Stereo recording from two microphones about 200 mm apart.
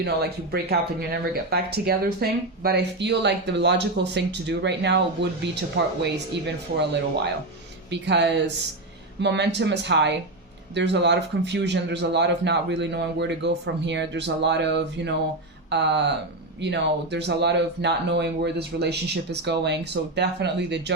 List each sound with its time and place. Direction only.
0.0 s speech: 50° right (ahead or behind)
6.7 s speech: 60° right (ahead or behind)